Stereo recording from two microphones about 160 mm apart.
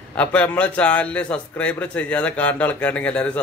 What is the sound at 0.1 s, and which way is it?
A man's voice, 10° left (ahead or behind).